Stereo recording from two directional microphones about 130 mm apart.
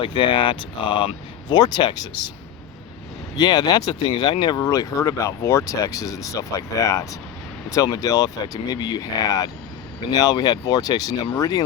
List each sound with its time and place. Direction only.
0.0 s speech: 40° left (ahead or behind)
3.3 s speech: 30° left (ahead or behind)